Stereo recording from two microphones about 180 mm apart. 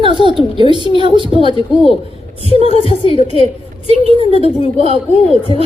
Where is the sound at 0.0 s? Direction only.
25° right (ahead or behind).